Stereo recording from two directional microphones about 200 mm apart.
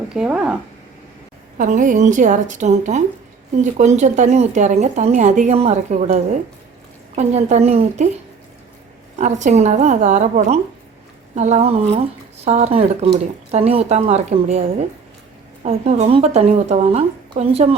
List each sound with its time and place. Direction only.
0.1 s speech: 5° right (ahead or behind)
1.5 s a woman's voice: 40° right (ahead or behind)
9.1 s a woman's voice: 35° right (ahead or behind)